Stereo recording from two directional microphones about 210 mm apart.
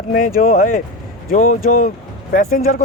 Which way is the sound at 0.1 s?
40° left (ahead or behind).